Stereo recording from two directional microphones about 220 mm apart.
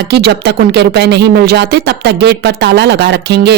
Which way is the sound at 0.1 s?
50° right (ahead or behind).